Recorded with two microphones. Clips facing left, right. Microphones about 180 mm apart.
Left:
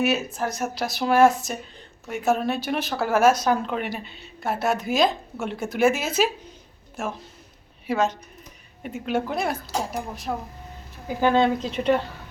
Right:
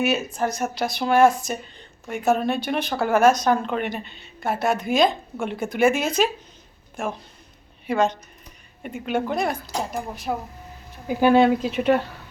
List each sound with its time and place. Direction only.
0.0 s speech: centre (ahead or behind)